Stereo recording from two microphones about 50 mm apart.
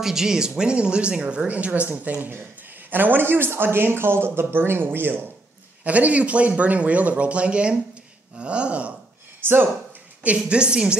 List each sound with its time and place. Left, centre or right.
0.0 s speech: centre; by 5.2 s right
5.9 s speech: right
9.4 s speech: right
10.4 s speech: centre